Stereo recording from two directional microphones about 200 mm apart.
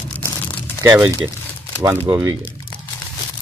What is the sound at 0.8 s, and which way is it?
Speech, 10° right (ahead or behind).